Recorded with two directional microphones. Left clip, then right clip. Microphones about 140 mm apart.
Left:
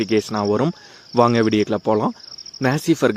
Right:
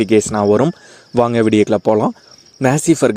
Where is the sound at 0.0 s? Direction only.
45° right (ahead or behind).